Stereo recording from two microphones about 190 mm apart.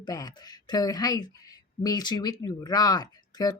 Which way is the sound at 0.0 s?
20° left (ahead or behind).